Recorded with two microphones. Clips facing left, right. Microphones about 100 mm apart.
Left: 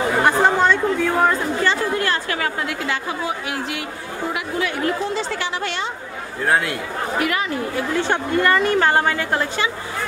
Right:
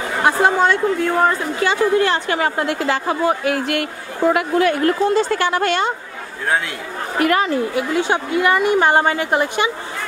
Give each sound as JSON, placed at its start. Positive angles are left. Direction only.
{"t": 0.2, "sound": "speech", "side_deg": 0}
{"t": 2.0, "sound": "a woman's voice", "side_deg": -25}
{"t": 7.2, "sound": "speech", "side_deg": -45}
{"t": 7.7, "sound": "a woman's voice", "side_deg": -10}